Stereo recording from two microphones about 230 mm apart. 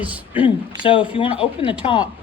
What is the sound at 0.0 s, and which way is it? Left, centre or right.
Speech, centre.